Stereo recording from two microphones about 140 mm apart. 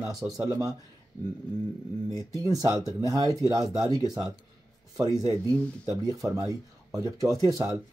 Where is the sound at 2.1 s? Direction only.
25° right (ahead or behind).